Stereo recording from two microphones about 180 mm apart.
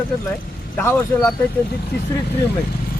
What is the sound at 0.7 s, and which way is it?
Speech, 10° left (ahead or behind).